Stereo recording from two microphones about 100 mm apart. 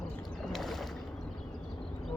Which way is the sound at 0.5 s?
Centre (ahead or behind).